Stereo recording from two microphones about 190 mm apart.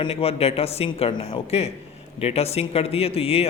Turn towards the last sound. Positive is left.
turn(degrees=30)  # may be behind; listen again after turning